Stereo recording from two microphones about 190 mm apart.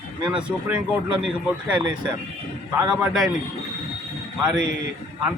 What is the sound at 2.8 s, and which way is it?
Speech, 5° right (ahead or behind).